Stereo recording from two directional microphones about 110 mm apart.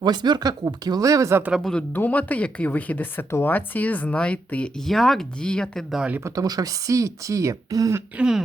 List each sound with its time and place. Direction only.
0.0 s speech: 40° right (ahead or behind)
1.4 s speech: 10° right (ahead or behind)
2.0 s speech: 15° left (ahead or behind)
5.9 s speech: 10° right (ahead or behind)
6.2 s speech: 35° right (ahead or behind)